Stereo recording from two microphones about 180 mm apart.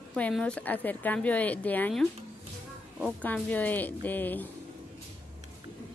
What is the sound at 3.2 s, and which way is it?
A woman's voice, 10° left (ahead or behind).